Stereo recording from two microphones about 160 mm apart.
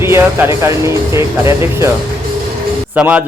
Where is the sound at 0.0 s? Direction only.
15° right (ahead or behind).